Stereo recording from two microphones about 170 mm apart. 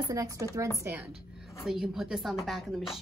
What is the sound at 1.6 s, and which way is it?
Speech, centre (ahead or behind).